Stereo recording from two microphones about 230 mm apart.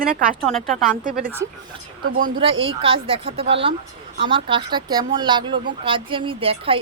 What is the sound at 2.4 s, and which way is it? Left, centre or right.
Speech, right.